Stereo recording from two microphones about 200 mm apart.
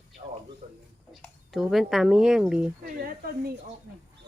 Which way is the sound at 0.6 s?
30° right (ahead or behind).